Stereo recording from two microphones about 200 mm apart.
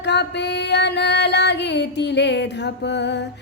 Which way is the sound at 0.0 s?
60° left (ahead or behind).